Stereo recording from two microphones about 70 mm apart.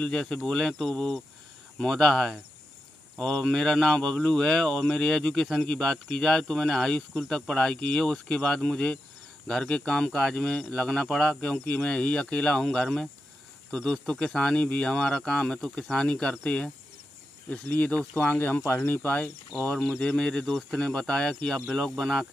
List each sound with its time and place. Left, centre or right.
0.0 s speech: centre; by 19.1 s left
20.0 s speech: centre